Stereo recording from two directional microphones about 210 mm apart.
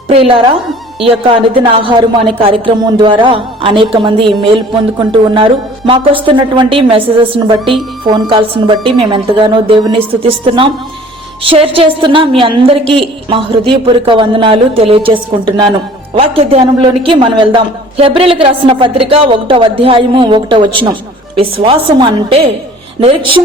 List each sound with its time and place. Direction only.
0.1 s speech: 25° right (ahead or behind)
1.5 s a man's voice: 25° right (ahead or behind)